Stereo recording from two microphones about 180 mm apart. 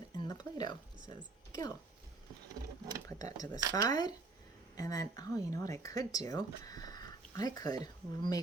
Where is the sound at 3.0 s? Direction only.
20° left (ahead or behind).